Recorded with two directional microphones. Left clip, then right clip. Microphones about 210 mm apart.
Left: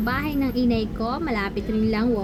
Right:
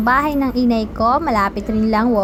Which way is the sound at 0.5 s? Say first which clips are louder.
Right 5 dB; 45° right (ahead or behind).